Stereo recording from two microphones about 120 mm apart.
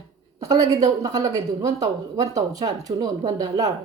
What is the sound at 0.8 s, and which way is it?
Speech, 30° right (ahead or behind).